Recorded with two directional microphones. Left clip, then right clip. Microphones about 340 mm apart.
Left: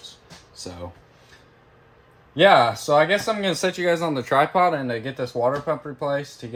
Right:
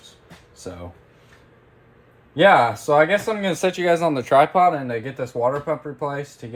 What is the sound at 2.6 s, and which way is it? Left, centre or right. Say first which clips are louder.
Speech: right 1 dB; left.